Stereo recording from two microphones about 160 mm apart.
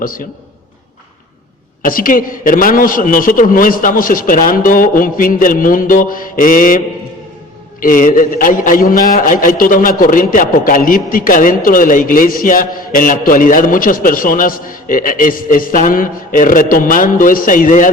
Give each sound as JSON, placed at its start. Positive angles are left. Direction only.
{"t": 1.8, "sound": "a man's voice", "side_deg": 60}